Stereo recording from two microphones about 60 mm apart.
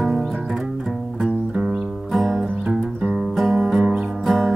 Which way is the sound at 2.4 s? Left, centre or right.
Centre.